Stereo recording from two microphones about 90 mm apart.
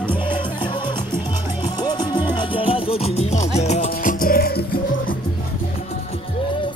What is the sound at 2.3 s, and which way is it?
Music, 70° left (ahead or behind).